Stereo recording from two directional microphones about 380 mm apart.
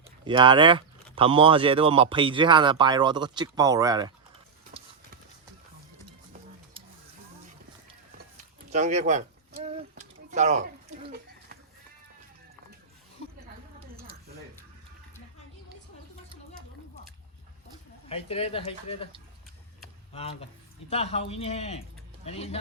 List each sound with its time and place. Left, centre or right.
0.3 s speech: centre
4.7 s clip-clop: centre
8.7 s speech: centre
9.6 s a sound: centre
13.7 s a sound: centre
18.1 s speech: centre
20.1 s speech: centre